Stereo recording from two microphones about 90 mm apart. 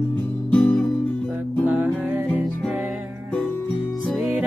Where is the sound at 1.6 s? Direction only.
20° right (ahead or behind).